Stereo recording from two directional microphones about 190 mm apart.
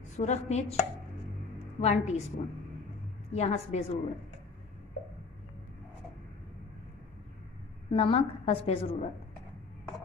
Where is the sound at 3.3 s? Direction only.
35° left (ahead or behind).